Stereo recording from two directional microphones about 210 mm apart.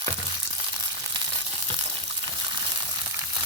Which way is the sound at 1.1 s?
20° right (ahead or behind).